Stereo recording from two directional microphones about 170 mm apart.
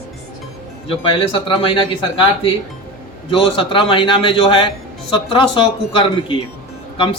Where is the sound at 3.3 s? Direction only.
30° left (ahead or behind).